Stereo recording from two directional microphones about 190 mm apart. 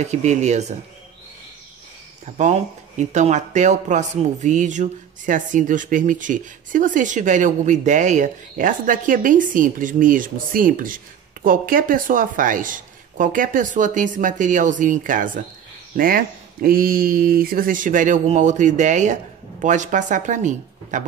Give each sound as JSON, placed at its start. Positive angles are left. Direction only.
{"t": 0.0, "sound": "speech", "side_deg": -35}
{"t": 2.3, "sound": "speech", "side_deg": -40}